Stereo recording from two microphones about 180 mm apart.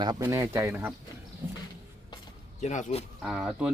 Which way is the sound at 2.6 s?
40° left (ahead or behind).